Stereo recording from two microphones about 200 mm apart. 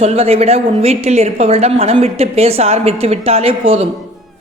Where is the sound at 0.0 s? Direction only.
30° right (ahead or behind).